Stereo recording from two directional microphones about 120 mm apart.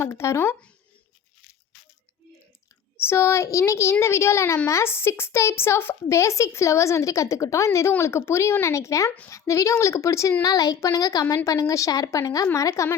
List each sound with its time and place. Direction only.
0.0 s a woman's voice: 25° left (ahead or behind)
3.0 s a woman's voice: 20° left (ahead or behind)